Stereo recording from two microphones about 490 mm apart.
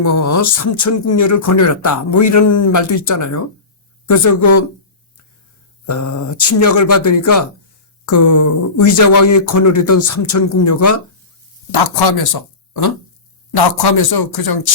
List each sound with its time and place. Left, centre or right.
0.0 s speech: left
5.8 s speech: left
11.7 s speech: left